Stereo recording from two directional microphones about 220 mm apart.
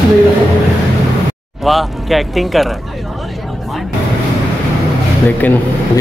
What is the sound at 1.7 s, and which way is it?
Speech, centre (ahead or behind).